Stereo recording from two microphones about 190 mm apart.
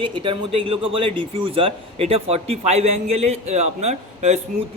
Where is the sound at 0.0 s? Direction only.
25° right (ahead or behind).